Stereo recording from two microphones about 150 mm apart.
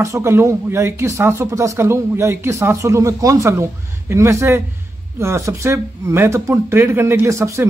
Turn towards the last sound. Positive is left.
turn(degrees=-20)  # may be behind; listen again after turning